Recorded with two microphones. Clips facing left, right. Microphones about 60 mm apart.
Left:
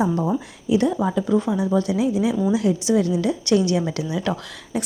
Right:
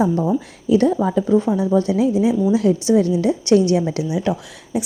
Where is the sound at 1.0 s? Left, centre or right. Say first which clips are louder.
Right 4 dB; right.